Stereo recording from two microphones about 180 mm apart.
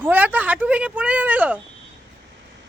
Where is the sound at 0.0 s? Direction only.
10° right (ahead or behind).